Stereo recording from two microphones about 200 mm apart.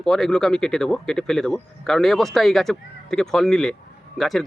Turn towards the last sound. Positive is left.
turn(degrees=0)  # may be behind; listen again after turning